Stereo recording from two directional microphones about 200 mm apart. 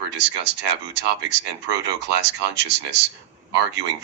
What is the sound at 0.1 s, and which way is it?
Speech, 60° right (ahead or behind).